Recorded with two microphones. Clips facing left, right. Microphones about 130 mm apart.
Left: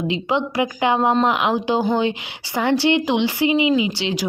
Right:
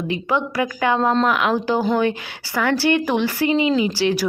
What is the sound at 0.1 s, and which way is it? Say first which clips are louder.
Speech: right 2 dB; 20° left (ahead or behind).